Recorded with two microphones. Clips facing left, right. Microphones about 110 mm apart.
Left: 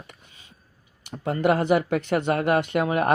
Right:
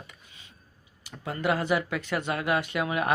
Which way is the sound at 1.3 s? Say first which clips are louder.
Left 6 dB; 50° left (ahead or behind).